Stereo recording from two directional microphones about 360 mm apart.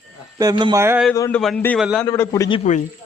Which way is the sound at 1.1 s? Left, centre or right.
Centre.